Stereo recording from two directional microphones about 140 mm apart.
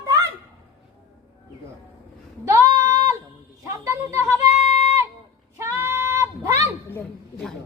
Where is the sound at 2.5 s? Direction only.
20° right (ahead or behind).